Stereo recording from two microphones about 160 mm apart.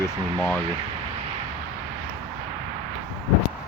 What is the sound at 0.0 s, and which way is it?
Speech, 15° left (ahead or behind).